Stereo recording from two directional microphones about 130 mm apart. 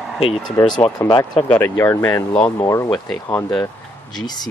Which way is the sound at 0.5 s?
35° left (ahead or behind).